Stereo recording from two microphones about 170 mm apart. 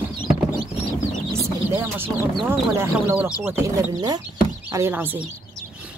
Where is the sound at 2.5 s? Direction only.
10° right (ahead or behind).